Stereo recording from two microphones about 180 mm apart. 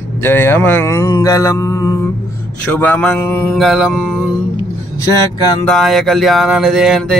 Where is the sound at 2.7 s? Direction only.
10° left (ahead or behind).